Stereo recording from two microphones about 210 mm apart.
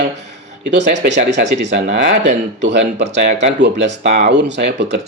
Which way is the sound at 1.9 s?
30° right (ahead or behind).